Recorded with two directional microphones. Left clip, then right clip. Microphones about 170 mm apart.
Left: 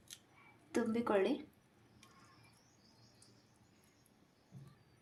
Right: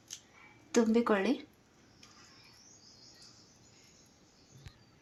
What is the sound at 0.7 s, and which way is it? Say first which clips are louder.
Speech: right 7 dB; 15° right (ahead or behind).